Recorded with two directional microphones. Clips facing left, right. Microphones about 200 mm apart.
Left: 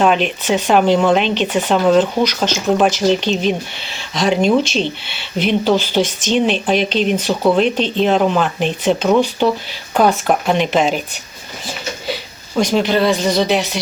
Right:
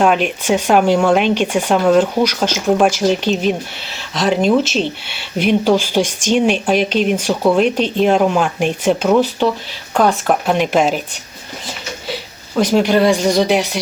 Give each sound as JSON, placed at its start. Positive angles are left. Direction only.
{"t": 0.0, "sound": "speech", "side_deg": -10}
{"t": 12.0, "sound": "speech", "side_deg": -5}